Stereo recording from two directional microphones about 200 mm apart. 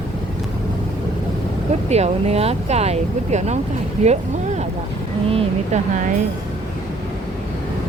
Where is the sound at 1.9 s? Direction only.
30° right (ahead or behind).